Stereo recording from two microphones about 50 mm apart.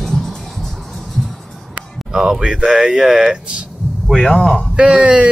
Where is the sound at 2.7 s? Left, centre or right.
Centre.